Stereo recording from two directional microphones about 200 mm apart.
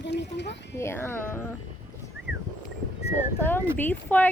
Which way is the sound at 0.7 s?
10° left (ahead or behind).